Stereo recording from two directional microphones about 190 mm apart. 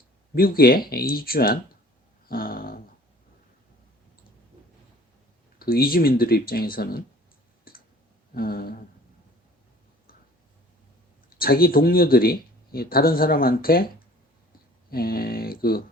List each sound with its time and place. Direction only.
0.3 s speech: 50° left (ahead or behind)
2.2 s dog: 50° left (ahead or behind)
5.5 s speech: 50° left (ahead or behind)
7.7 s clicking: 50° left (ahead or behind)
8.3 s speech: 50° left (ahead or behind)
11.3 s speech: 50° left (ahead or behind)